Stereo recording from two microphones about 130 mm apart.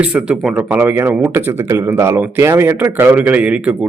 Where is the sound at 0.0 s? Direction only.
5° right (ahead or behind).